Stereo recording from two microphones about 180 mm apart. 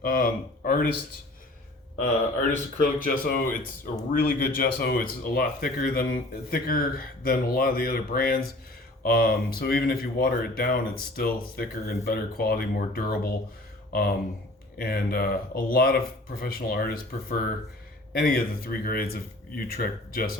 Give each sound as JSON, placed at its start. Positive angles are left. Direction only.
{"t": 0.0, "sound": "speech", "side_deg": 55}
{"t": 2.0, "sound": "a man's voice", "side_deg": 50}
{"t": 14.8, "sound": "speech", "side_deg": 55}